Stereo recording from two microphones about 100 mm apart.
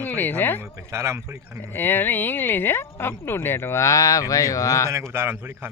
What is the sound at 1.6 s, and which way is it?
Speech, 20° left (ahead or behind).